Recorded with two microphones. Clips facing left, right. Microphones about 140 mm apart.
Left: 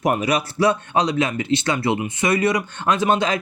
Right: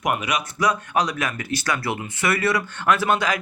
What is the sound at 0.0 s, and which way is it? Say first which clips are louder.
Speech: left 4 dB; 35° left (ahead or behind).